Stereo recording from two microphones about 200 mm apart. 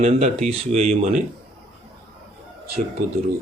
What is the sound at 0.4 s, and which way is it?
Speech, 30° right (ahead or behind).